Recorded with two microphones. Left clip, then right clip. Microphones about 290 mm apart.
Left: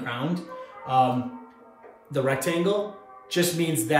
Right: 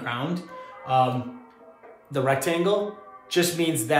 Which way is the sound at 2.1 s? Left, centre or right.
Centre.